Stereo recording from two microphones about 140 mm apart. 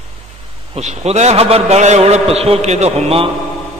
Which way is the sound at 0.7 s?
50° right (ahead or behind).